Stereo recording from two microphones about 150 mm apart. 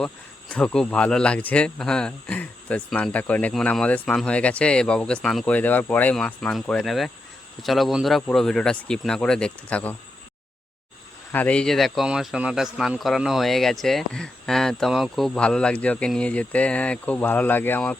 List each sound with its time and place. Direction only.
0.5 s speech: 5° left (ahead or behind)
11.3 s speech: 10° left (ahead or behind)